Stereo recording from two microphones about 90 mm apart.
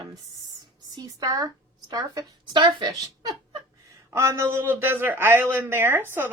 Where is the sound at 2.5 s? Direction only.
55° right (ahead or behind).